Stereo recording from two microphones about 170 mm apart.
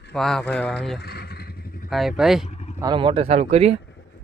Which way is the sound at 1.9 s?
Centre (ahead or behind).